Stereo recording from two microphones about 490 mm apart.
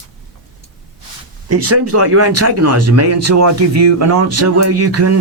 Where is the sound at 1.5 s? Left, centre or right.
Right.